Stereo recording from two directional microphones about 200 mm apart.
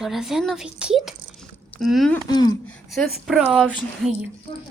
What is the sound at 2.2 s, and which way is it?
Speech, 20° left (ahead or behind).